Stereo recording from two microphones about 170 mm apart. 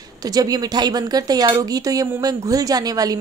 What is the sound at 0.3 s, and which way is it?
Speech, 20° right (ahead or behind).